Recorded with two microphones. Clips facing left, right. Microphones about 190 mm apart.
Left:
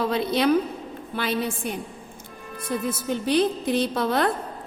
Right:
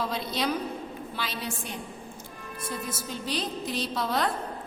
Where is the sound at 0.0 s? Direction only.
60° left (ahead or behind).